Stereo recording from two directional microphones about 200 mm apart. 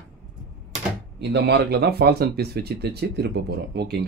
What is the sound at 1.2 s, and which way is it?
Speech, 55° right (ahead or behind).